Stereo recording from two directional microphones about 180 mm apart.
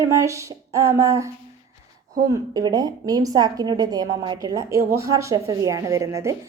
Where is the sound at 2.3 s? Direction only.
20° right (ahead or behind).